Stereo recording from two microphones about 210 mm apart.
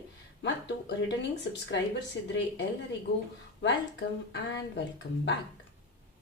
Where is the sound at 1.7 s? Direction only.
55° left (ahead or behind).